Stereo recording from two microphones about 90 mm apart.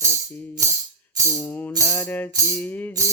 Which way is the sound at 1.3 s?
20° left (ahead or behind).